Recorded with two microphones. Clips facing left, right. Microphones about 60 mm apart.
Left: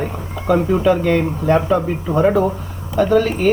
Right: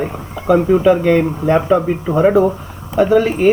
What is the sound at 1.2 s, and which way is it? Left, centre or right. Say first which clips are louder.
Speech: right 2 dB; right.